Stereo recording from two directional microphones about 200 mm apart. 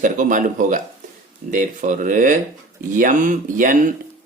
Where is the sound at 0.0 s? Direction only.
40° right (ahead or behind).